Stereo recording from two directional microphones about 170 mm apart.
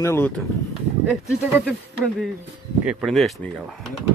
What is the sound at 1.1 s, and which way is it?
Speech, 5° right (ahead or behind).